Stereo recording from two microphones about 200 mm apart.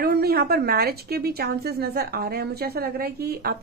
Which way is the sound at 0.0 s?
50° right (ahead or behind).